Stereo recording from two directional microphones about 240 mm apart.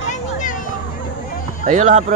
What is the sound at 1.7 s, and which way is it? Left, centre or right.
Speech, right.